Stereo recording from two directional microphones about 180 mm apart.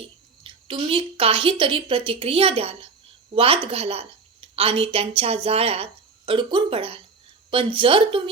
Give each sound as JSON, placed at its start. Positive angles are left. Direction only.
{"t": 0.4, "sound": "a woman's voice", "side_deg": -30}